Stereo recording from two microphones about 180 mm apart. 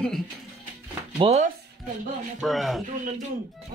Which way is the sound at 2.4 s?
Centre (ahead or behind).